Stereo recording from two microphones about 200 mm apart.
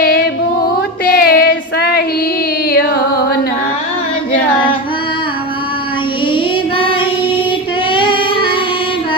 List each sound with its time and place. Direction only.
0.0 s music: 50° left (ahead or behind)
1.1 s child singing: 50° left (ahead or behind)
2.6 s carnatic music: 50° left (ahead or behind)
6.3 s child singing: 25° left (ahead or behind)